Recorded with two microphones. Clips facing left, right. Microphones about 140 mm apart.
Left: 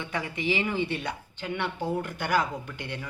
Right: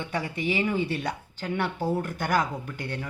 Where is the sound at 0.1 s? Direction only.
35° right (ahead or behind).